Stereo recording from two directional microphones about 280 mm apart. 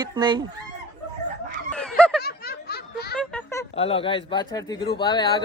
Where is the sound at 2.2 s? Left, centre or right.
Left.